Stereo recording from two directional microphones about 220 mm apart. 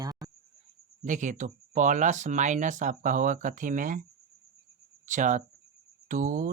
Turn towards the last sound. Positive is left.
turn(degrees=-35)  # may be behind; listen again after turning